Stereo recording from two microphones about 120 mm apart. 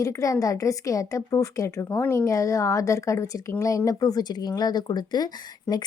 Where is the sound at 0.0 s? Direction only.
25° left (ahead or behind).